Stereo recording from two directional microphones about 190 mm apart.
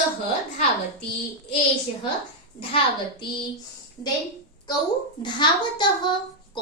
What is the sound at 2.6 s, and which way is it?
Speech, 25° left (ahead or behind).